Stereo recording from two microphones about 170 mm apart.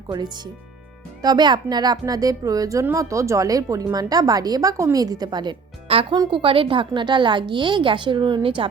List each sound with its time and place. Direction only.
0.1 s speech: 25° right (ahead or behind)